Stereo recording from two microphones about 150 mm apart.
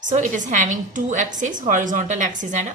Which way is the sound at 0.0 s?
55° right (ahead or behind).